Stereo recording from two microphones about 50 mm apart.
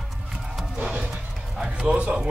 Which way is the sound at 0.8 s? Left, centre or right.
Right.